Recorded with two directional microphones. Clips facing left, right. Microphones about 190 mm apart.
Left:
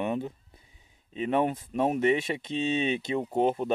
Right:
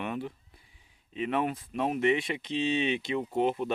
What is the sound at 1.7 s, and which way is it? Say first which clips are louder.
Speech: left 1 dB; 35° left (ahead or behind).